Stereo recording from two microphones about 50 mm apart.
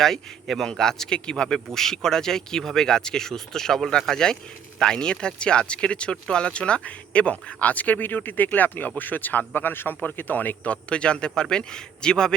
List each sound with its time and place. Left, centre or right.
0.0 s speech: centre